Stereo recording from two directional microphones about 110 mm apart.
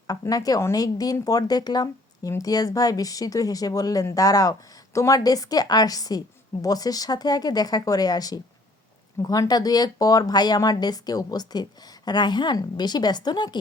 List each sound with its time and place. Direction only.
0.1 s a woman's voice: 35° left (ahead or behind)